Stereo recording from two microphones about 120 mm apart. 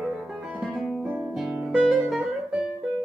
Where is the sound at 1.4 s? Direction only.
5° right (ahead or behind).